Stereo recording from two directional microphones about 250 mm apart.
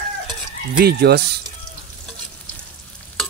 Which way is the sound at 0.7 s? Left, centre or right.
Right.